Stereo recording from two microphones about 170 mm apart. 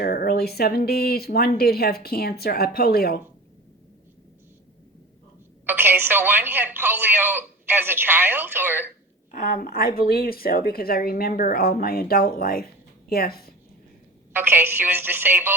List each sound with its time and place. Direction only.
0.0 s speech: 65° left (ahead or behind)
5.6 s speech: 10° right (ahead or behind)
9.3 s a woman's voice: 55° left (ahead or behind)
14.3 s speech: 10° right (ahead or behind)